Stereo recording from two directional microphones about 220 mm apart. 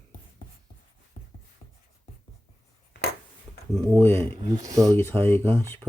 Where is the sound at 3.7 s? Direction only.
5° left (ahead or behind).